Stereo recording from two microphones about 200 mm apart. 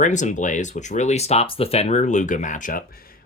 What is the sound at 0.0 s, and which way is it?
Speech, 40° left (ahead or behind).